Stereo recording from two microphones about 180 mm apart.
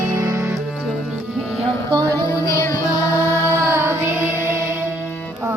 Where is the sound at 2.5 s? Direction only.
15° left (ahead or behind).